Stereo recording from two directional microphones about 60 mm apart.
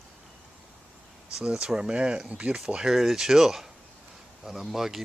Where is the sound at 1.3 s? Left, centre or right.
Centre.